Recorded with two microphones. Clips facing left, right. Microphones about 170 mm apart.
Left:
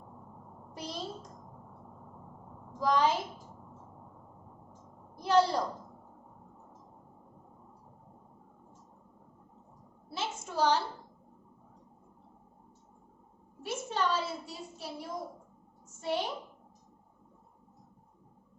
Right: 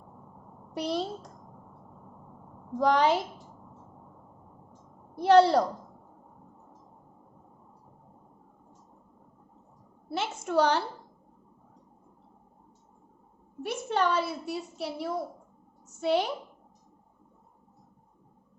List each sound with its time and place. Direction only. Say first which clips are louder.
0.7 s a child's voice: right 11 dB; 65° right (ahead or behind)
2.7 s a woman's voice: right 4 dB; 70° right (ahead or behind)
5.1 s a woman's voice: right 7 dB; 65° right (ahead or behind)
10.1 s a woman's voice: right 7 dB; 65° right (ahead or behind)
13.6 s a woman's voice: right 5 dB; 60° right (ahead or behind)